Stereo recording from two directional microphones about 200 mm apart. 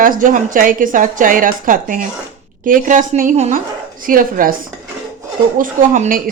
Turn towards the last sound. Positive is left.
turn(degrees=-40)  # may be behind; listen again after turning